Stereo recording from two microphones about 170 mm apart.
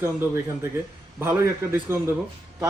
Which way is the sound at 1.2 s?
15° right (ahead or behind).